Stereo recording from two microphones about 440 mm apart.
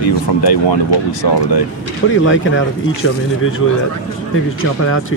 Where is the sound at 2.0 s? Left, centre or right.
Left.